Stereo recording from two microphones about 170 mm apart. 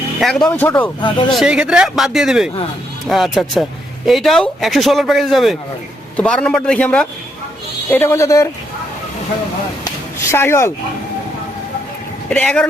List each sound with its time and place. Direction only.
0.2 s speech: centre (ahead or behind)
1.3 s speech: 5° right (ahead or behind); by 8.4 s 20° left (ahead or behind)
9.8 s a sound: 15° left (ahead or behind)
12.3 s speech: 5° left (ahead or behind)